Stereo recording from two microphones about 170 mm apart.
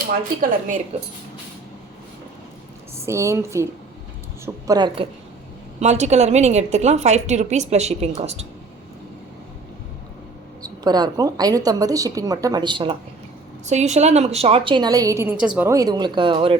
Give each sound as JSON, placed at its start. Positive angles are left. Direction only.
{"t": 0.9, "sound": "a woman's voice", "side_deg": -35}
{"t": 3.1, "sound": "a woman's voice", "side_deg": -15}
{"t": 5.8, "sound": "a woman's voice", "side_deg": -45}
{"t": 10.6, "sound": "a woman's voice", "side_deg": -25}
{"t": 13.7, "sound": "a woman's voice", "side_deg": -45}